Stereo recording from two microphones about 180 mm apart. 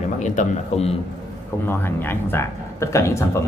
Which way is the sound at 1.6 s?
10° left (ahead or behind).